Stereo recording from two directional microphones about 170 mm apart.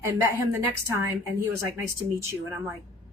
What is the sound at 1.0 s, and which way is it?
Speech, 15° right (ahead or behind).